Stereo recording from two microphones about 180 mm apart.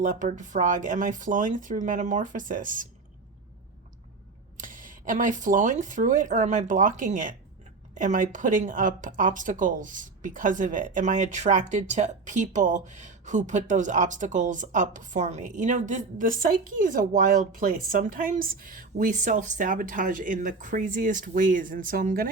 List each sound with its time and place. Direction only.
0.0 s speech: 45° right (ahead or behind)
4.5 s speech: 50° right (ahead or behind)